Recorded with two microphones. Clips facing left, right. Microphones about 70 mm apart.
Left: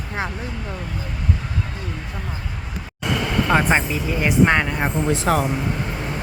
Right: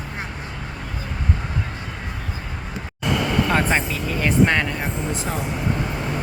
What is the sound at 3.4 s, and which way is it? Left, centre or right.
Speech, centre.